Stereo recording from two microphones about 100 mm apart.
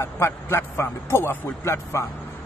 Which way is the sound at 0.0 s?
25° left (ahead or behind).